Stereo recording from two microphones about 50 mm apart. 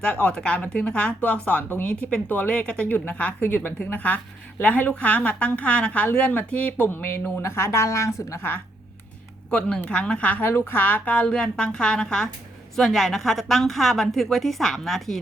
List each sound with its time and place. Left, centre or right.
0.3 s a woman's voice: left
3.4 s a woman's voice: left
6.9 s speech: left
7.6 s a woman's voice: left
9.5 s a woman's voice: centre
10.4 s a woman's voice: left; by 15.2 s centre